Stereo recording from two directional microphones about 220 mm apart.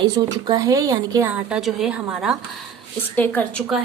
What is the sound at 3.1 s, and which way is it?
Speech, 5° left (ahead or behind).